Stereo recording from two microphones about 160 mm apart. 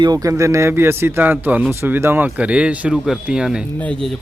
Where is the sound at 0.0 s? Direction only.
20° right (ahead or behind).